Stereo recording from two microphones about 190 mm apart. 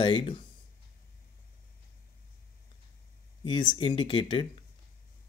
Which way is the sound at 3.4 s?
25° left (ahead or behind).